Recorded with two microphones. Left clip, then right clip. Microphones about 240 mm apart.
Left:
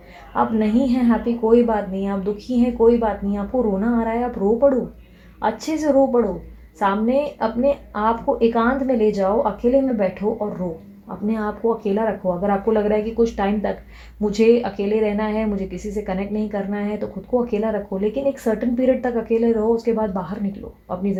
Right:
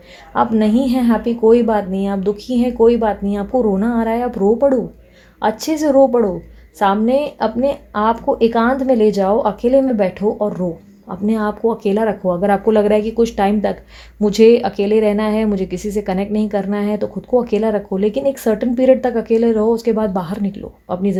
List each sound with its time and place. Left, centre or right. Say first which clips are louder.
0.3 s speech: right 4 dB; right
11.3 s speech: right 4 dB; right